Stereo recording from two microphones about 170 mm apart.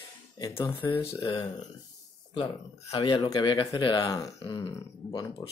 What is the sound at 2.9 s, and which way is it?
Speech, 25° left (ahead or behind).